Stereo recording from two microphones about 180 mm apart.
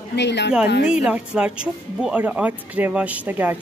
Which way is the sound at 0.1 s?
70° left (ahead or behind).